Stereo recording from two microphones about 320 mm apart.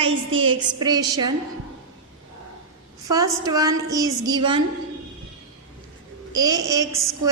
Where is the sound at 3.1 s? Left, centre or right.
Centre.